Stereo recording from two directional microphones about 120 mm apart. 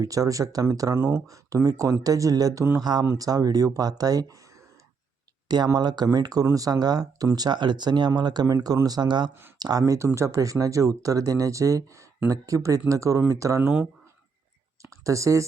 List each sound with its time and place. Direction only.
0.0 s speech: 30° right (ahead or behind)
0.9 s speech: 15° right (ahead or behind)
1.3 s speech: 30° right (ahead or behind)
5.5 s speech: 35° right (ahead or behind)
13.6 s speech: 15° right (ahead or behind)
14.8 s a sound: 25° right (ahead or behind)